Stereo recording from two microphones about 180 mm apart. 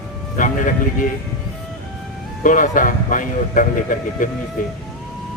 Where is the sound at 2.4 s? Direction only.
50° left (ahead or behind).